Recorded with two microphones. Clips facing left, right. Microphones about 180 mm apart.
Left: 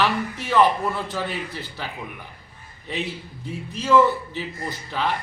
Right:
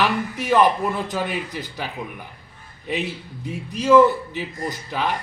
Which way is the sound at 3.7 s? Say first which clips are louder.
Right 4 dB; 15° right (ahead or behind).